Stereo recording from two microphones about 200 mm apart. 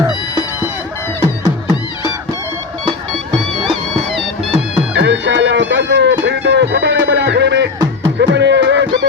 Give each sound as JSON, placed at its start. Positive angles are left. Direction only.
{"t": 4.9, "sound": "music", "side_deg": -60}